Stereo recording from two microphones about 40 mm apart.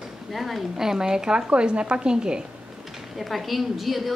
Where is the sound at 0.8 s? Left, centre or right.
Centre.